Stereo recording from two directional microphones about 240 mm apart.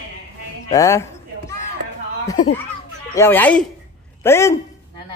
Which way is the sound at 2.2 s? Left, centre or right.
Centre.